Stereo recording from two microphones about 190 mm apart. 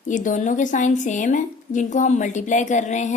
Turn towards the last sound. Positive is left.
turn(degrees=40)  # may be behind; listen again after turning